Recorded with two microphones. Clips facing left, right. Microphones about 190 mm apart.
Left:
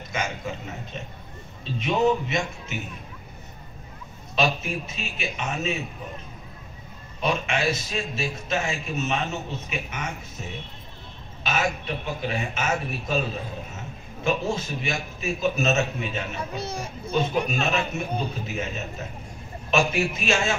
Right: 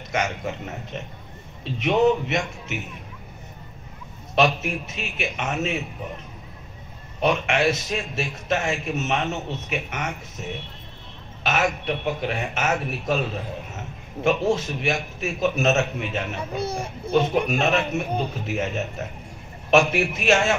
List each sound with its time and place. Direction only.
0.1 s a man's voice: 70° right (ahead or behind)
1.6 s a man's voice: 70° right (ahead or behind)
4.6 s a man's voice: 70° right (ahead or behind)
7.2 s a man's voice: 65° right (ahead or behind)
11.4 s a man's voice: 70° right (ahead or behind)
14.2 s a man's voice: 70° right (ahead or behind)
19.9 s a man's voice: 70° right (ahead or behind)